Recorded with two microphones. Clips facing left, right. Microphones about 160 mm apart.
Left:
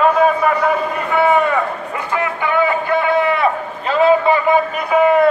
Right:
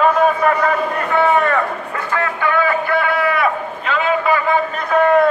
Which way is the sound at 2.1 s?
15° left (ahead or behind).